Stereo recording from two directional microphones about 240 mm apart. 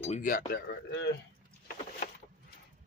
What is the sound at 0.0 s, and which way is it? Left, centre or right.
Speech, left.